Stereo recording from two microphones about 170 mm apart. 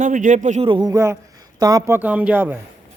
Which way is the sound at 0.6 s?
25° right (ahead or behind).